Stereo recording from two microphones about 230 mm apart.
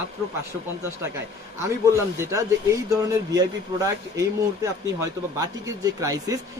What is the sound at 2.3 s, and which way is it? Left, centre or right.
A man's voice, centre.